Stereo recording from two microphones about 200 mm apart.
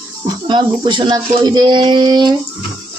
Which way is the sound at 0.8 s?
25° right (ahead or behind).